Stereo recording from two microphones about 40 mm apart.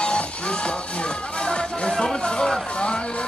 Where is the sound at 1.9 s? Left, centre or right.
Centre.